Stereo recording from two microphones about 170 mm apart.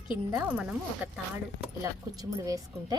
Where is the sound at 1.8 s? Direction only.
20° right (ahead or behind).